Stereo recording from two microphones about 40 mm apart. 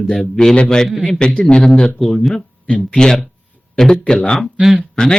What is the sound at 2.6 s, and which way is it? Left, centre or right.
Speech, left.